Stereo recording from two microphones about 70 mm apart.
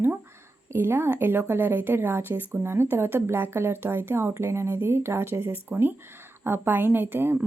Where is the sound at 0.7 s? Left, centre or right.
Right.